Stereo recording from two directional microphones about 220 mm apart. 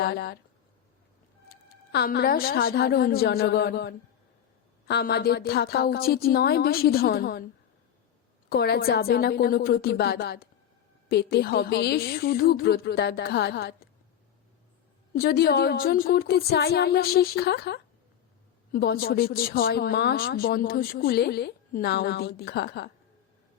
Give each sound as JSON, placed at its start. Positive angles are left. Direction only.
{"t": 0.0, "sound": "speech", "side_deg": 45}
{"t": 1.5, "sound": "a woman's voice", "side_deg": 45}
{"t": 8.4, "sound": "speech", "side_deg": 45}
{"t": 15.1, "sound": "speech", "side_deg": 45}